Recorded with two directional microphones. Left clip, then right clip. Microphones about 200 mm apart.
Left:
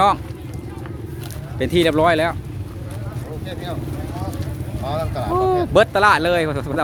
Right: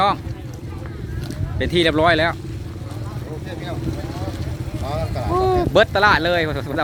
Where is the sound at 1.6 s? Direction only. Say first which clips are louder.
Left 1 dB; 10° left (ahead or behind).